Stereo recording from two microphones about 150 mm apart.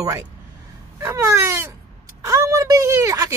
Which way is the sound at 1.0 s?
20° right (ahead or behind).